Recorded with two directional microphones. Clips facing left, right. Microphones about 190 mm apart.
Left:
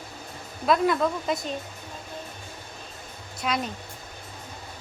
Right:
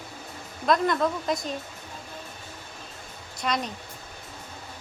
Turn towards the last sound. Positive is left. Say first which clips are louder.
# even
turn(degrees=5)  # may be behind; listen again after turning